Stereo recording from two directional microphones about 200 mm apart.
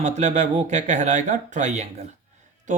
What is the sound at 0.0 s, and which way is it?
Speech, 35° right (ahead or behind).